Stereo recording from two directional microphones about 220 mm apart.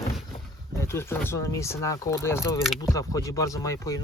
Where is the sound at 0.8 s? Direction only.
10° left (ahead or behind).